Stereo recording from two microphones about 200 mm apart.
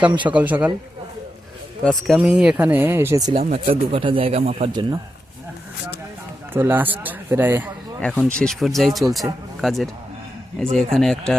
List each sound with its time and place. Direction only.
0.0 s speech: 5° right (ahead or behind)
1.8 s speech: 5° left (ahead or behind); by 3.3 s 15° right (ahead or behind)
3.3 s speech: 35° right (ahead or behind)
6.5 s speech: 10° right (ahead or behind)
8.0 s speech: 5° left (ahead or behind)